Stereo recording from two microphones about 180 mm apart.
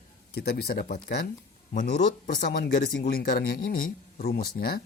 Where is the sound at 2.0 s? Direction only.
45° left (ahead or behind).